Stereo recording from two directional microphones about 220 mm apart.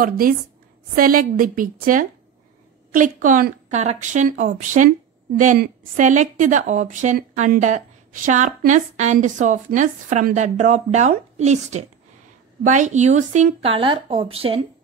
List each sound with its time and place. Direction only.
0.9 s a woman's voice: 40° right (ahead or behind)